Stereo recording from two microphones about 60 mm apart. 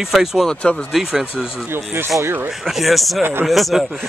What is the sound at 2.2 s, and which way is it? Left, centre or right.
Speech, right.